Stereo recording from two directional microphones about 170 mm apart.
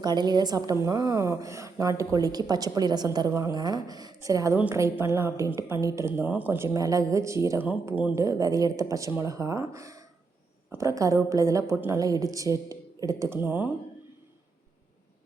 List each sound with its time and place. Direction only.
0.0 s a woman's voice: 25° right (ahead or behind)